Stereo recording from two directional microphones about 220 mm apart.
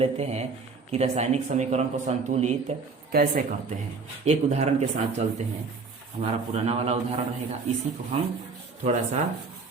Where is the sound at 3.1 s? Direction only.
45° right (ahead or behind).